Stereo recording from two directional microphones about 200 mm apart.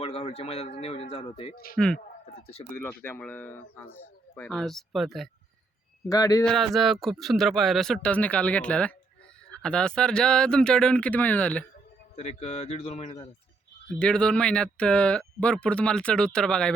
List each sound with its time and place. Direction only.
0.0 s speech: 30° left (ahead or behind)
1.7 s speech: 5° left (ahead or behind)
6.1 s speech: 20° left (ahead or behind)
6.4 s speech: centre (ahead or behind)
12.1 s speech: 35° left (ahead or behind)
14.0 s speech: 5° left (ahead or behind)